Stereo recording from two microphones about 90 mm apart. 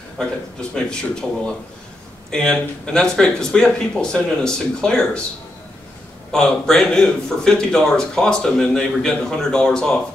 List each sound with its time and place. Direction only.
0.2 s speech: 10° left (ahead or behind)
6.3 s speech: 5° left (ahead or behind)